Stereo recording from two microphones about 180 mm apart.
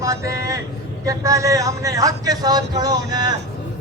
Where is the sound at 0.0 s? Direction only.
15° right (ahead or behind).